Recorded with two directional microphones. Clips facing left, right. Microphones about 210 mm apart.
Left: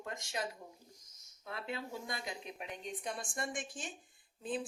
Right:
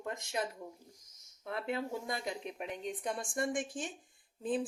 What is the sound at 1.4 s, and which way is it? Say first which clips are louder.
A woman's voice: right 6 dB; 55° right (ahead or behind).